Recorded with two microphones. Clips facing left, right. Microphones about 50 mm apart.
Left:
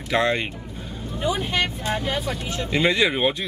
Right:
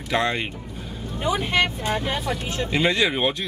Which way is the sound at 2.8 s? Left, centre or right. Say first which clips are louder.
Left 2 dB; centre.